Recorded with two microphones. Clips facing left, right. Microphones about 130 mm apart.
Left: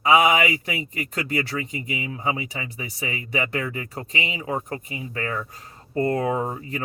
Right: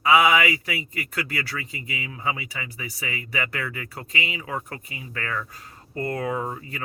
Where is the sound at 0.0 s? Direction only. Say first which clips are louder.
Left 1 dB; 25° left (ahead or behind).